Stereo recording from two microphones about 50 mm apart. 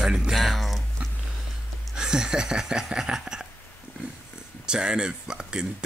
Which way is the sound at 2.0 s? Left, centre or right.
Centre.